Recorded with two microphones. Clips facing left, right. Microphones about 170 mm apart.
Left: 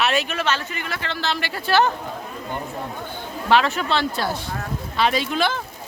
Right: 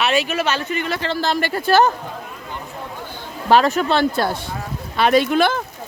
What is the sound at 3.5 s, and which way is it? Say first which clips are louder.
Speech: right 4 dB; 45° right (ahead or behind).